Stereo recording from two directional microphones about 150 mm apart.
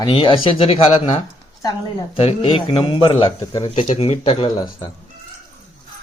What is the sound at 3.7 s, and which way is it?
Speech, 50° left (ahead or behind).